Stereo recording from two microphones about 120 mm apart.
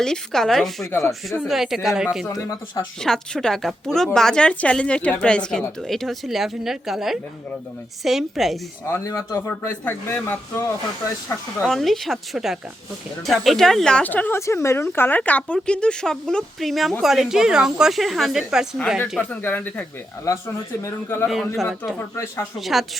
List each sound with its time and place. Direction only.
0.0 s a woman's voice: 5° left (ahead or behind)
2.2 s speech: 25° left (ahead or behind)
3.0 s a woman's voice: 5° left (ahead or behind)
8.9 s speech: 25° left (ahead or behind)
11.6 s a woman's voice: centre (ahead or behind)
19.1 s speech: 10° left (ahead or behind)
20.8 s speech: 20° left (ahead or behind)
21.2 s a woman's voice: centre (ahead or behind)
21.9 s speech: 20° left (ahead or behind)
22.5 s a woman's voice: centre (ahead or behind)